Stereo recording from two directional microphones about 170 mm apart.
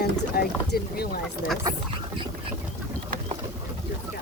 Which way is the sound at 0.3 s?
65° left (ahead or behind).